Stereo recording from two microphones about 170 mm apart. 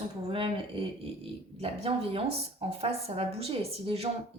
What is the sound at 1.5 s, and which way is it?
Speech, 35° right (ahead or behind).